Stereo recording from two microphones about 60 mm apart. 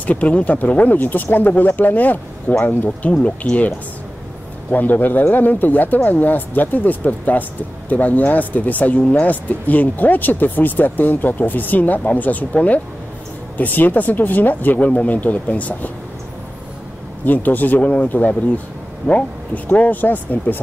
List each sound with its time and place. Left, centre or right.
0.0 s speech: left
3.1 s speech: centre
17.2 s speech: left